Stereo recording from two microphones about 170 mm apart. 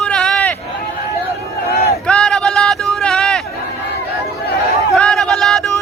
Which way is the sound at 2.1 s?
5° left (ahead or behind).